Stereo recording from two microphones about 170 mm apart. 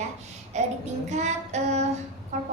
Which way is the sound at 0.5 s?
40° right (ahead or behind).